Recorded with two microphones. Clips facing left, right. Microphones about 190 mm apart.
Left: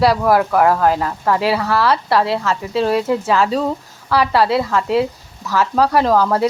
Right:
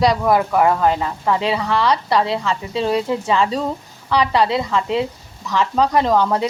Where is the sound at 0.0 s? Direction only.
5° left (ahead or behind).